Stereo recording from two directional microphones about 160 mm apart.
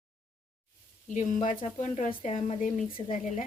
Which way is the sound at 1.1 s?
50° left (ahead or behind).